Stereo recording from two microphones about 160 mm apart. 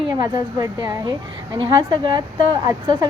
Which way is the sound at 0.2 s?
25° right (ahead or behind).